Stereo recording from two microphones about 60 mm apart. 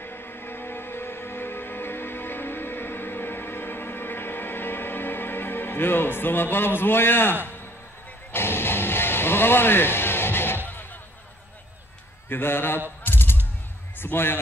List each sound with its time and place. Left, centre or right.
0.0 s music: left
10.7 s a sound: left
12.3 s a man's voice: left
13.0 s gunshot: left
13.9 s speech: left